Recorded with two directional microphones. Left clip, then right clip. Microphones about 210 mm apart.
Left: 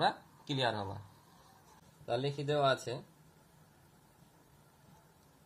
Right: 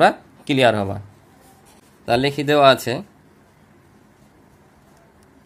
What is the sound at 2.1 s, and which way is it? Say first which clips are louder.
Speech: right 17 dB; 55° right (ahead or behind).